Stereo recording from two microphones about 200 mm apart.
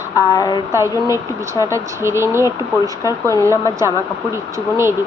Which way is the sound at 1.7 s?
15° right (ahead or behind).